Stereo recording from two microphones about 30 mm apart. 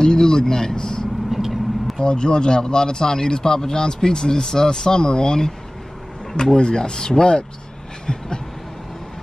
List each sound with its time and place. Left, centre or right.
0.0 s speech: left
1.3 s vehicle: centre
2.0 s speech: left